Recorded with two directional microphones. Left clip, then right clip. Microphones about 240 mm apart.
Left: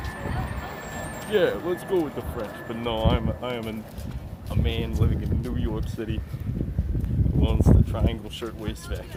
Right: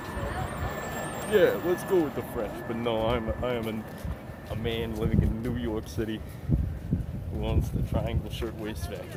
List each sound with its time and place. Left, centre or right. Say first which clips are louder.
0.2 s vehicle: right 1 dB; right
1.3 s speech: even; centre
7.4 s speech: left 8 dB; left